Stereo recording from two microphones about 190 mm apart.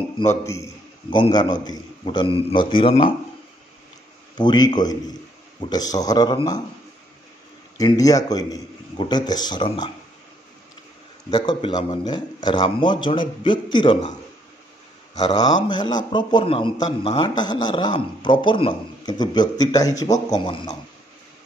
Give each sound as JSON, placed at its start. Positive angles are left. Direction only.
{"t": 0.3, "sound": "a man's voice", "side_deg": 15}
{"t": 4.4, "sound": "a man's voice", "side_deg": 25}
{"t": 7.7, "sound": "a man's voice", "side_deg": 20}
{"t": 11.2, "sound": "a man's voice", "side_deg": 20}
{"t": 15.1, "sound": "a man's voice", "side_deg": 20}